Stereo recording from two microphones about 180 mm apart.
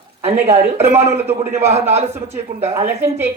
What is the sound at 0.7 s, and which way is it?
A man's voice, 15° right (ahead or behind).